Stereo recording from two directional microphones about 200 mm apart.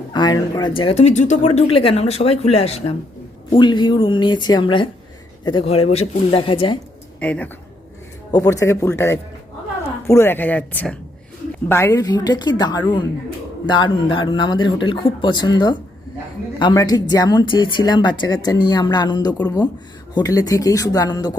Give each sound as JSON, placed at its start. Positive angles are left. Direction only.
{"t": 0.1, "sound": "a woman's voice", "side_deg": 20}
{"t": 7.2, "sound": "a woman's voice", "side_deg": 5}